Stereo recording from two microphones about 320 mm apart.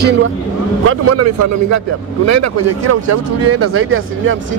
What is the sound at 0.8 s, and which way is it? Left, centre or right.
A man's voice, right.